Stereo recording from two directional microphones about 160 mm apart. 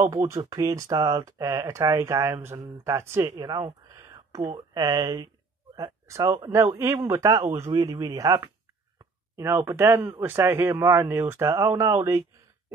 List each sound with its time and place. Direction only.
0.4 s speech: 25° right (ahead or behind)
9.4 s speech: 20° right (ahead or behind)